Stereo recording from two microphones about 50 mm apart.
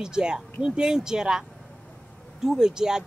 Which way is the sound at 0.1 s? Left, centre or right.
Centre.